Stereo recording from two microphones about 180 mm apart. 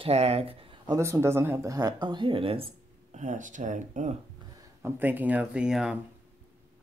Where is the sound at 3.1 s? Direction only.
45° right (ahead or behind).